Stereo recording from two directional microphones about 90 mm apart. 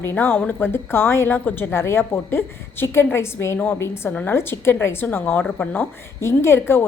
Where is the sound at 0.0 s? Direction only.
25° left (ahead or behind).